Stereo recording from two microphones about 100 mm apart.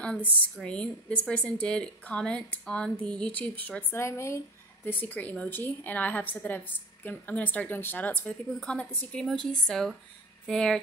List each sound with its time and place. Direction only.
0.0 s a woman's voice: 10° left (ahead or behind)
3.9 s speech: 25° left (ahead or behind)
4.8 s a woman's voice: 15° left (ahead or behind)